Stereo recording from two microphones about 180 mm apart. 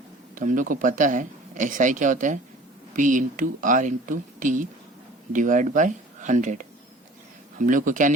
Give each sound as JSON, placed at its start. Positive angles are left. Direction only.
{"t": 0.3, "sound": "speech", "side_deg": -45}